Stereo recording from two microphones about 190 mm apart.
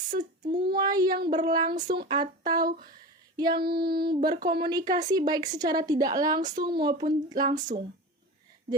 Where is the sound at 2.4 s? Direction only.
20° right (ahead or behind).